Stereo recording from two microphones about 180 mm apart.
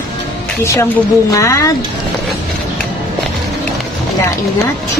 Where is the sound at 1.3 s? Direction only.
15° left (ahead or behind).